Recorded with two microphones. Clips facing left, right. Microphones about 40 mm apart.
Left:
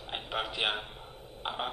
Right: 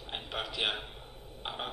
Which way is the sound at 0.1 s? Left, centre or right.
Centre.